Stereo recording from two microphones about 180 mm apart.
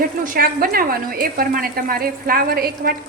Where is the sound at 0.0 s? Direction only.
55° right (ahead or behind).